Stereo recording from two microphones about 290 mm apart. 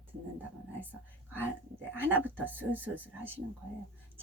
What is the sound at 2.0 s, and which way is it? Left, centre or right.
Speech, centre.